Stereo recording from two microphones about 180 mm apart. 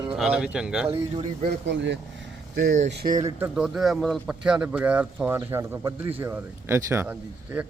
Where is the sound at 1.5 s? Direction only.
80° right.